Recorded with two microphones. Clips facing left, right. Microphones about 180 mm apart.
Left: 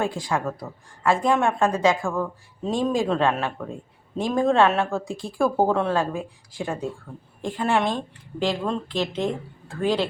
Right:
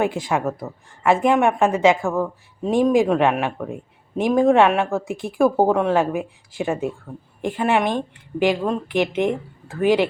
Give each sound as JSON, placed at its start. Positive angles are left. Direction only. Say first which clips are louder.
{"t": 0.0, "sound": "a woman's voice", "louder": "right 4 dB", "side_deg": -20}